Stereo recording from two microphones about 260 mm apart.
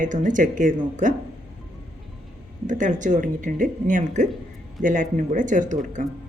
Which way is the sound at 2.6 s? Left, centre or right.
Right.